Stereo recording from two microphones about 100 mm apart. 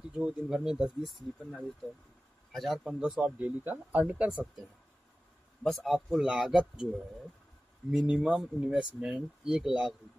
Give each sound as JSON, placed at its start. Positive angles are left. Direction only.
{"t": 0.1, "sound": "speech", "side_deg": -10}
{"t": 2.5, "sound": "a man's voice", "side_deg": 0}
{"t": 5.6, "sound": "a man's voice", "side_deg": 0}
{"t": 8.1, "sound": "speech", "side_deg": -10}